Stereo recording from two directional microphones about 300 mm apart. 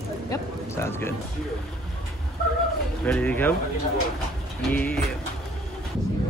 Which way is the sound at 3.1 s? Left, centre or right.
Centre.